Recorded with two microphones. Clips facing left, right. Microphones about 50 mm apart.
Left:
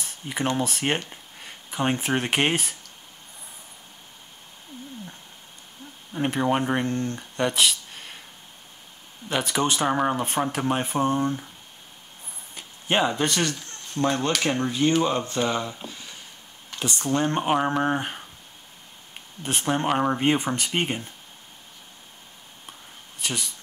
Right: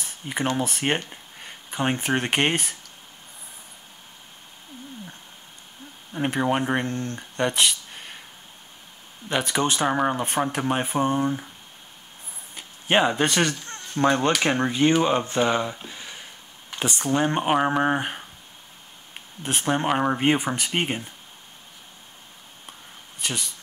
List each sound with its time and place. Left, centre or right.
0.0 s speech: centre
6.1 s speech: centre
9.3 s speech: centre
12.8 s speech: centre
13.3 s speech: right
15.9 s a sound: right
16.7 s speech: centre
19.4 s speech: centre
23.2 s speech: centre